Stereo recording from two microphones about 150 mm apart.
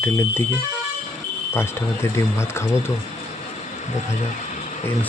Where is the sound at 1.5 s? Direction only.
15° left (ahead or behind).